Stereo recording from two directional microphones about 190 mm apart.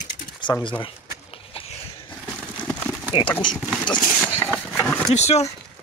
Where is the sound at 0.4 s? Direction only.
25° left (ahead or behind).